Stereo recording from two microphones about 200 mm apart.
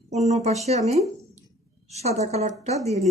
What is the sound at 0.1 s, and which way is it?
Speech, 35° right (ahead or behind).